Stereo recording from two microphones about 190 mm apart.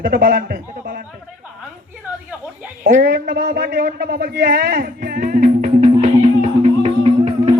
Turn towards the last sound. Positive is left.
turn(degrees=-30)  # may be behind; listen again after turning